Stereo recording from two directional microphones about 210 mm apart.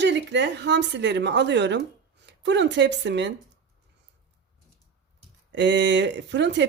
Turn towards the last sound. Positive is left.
turn(degrees=-55)  # may be behind; listen again after turning